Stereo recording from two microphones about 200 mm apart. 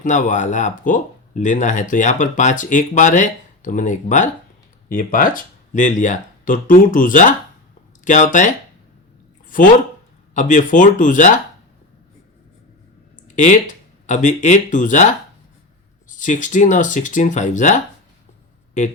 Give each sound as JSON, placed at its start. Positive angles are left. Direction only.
{"t": 0.0, "sound": "speech", "side_deg": 40}
{"t": 9.5, "sound": "speech", "side_deg": 40}
{"t": 13.2, "sound": "speech", "side_deg": 40}
{"t": 16.0, "sound": "speech", "side_deg": 40}